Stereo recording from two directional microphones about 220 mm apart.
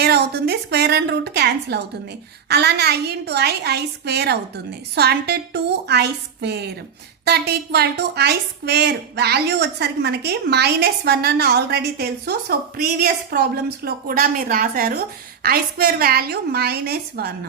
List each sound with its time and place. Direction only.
0.0 s a woman's voice: 50° right (ahead or behind)